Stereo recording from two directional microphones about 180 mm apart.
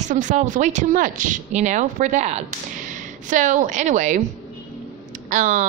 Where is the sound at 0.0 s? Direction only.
45° right (ahead or behind).